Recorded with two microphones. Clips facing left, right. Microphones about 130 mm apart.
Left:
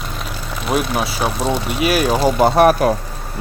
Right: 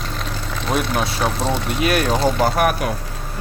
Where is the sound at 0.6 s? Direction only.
10° left (ahead or behind).